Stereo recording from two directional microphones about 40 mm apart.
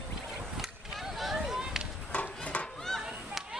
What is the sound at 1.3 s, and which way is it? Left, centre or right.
Chop, centre.